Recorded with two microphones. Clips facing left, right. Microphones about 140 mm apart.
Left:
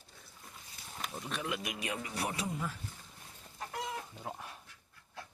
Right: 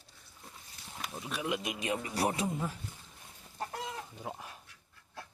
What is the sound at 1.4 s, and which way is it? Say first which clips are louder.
Speech: right 6 dB; 20° right (ahead or behind).